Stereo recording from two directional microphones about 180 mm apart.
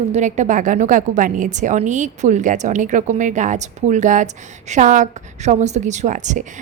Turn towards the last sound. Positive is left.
turn(degrees=-40)  # may be behind; listen again after turning